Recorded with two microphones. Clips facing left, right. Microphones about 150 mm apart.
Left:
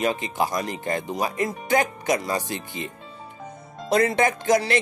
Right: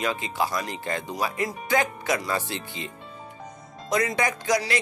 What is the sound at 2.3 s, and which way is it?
Speech, 15° left (ahead or behind).